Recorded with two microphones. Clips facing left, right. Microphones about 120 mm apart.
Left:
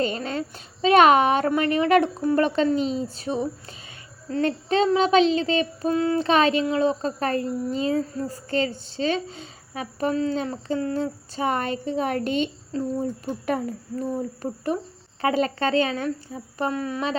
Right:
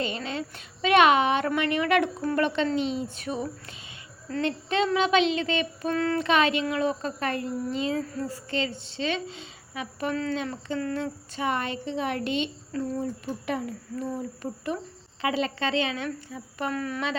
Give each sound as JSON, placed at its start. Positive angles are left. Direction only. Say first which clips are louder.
{"t": 0.0, "sound": "a sound", "louder": "left 5 dB", "side_deg": 40}
{"t": 0.8, "sound": "a woman's voice", "louder": "left 4 dB", "side_deg": 35}
{"t": 5.9, "sound": "speech", "louder": "left 3 dB", "side_deg": 20}
{"t": 6.1, "sound": "a woman's voice", "louder": "left 3 dB", "side_deg": 35}
{"t": 16.0, "sound": "a woman's voice", "louder": "left 5 dB", "side_deg": 30}